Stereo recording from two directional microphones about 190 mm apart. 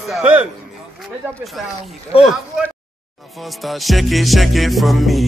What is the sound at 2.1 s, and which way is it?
Speech, 30° left (ahead or behind).